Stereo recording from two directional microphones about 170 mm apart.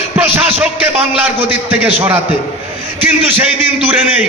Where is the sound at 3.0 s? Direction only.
10° right (ahead or behind).